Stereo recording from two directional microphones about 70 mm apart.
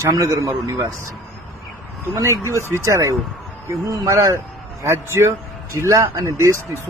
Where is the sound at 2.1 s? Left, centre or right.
Right.